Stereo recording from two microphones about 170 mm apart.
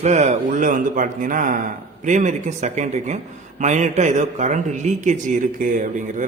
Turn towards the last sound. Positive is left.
turn(degrees=-50)  # may be behind; listen again after turning